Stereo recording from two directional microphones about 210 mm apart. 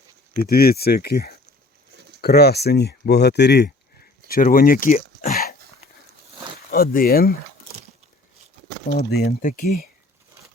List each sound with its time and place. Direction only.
0.4 s speech: 45° left (ahead or behind)
4.3 s speech: 40° left (ahead or behind)
6.7 s speech: 45° left (ahead or behind)
8.9 s speech: 50° left (ahead or behind)